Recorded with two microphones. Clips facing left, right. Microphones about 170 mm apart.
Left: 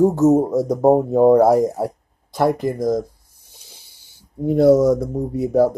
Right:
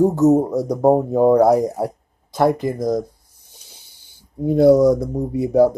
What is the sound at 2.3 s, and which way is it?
Speech, 20° right (ahead or behind).